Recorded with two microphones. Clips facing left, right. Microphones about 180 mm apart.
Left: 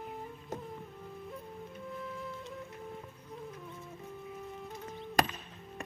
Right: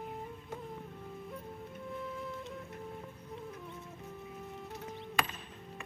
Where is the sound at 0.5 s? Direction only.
40° left (ahead or behind).